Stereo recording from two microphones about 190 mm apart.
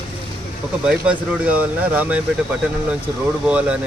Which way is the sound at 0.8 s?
5° right (ahead or behind).